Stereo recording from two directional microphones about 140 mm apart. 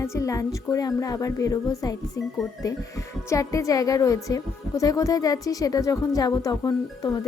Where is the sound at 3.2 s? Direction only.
25° left (ahead or behind).